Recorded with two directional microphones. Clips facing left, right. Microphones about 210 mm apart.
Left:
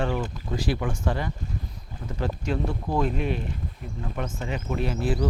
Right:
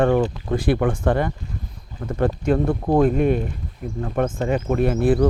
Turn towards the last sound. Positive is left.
turn(degrees=-55)  # may be behind; listen again after turning